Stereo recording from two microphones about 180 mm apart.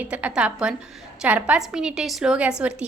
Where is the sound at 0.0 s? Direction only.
10° right (ahead or behind).